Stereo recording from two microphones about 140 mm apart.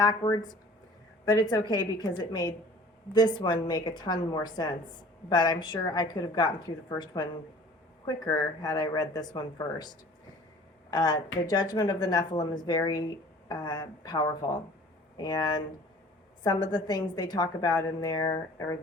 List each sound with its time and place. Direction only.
0.0 s a woman's voice: 30° left (ahead or behind)
10.9 s a woman's voice: 30° left (ahead or behind)